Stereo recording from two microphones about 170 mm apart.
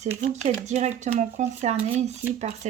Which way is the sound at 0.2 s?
40° right (ahead or behind).